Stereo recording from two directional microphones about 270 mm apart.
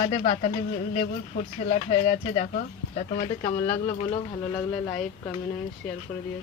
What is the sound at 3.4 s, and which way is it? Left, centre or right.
Speech, centre.